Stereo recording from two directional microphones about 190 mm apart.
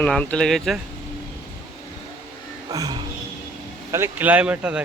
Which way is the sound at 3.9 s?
15° right (ahead or behind).